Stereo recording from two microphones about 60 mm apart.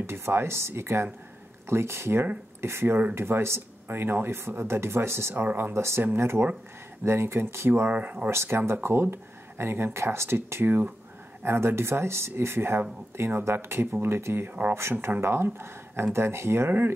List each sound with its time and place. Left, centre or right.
0.0 s speech: right
5.8 s speech: right
8.3 s speech: right
14.8 s speech: right